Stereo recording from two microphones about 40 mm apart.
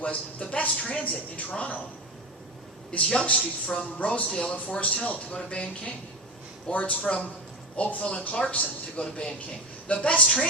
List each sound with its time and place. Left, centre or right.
0.0 s speech: left
2.9 s speech: left
9.0 s speech: left
9.9 s speech: left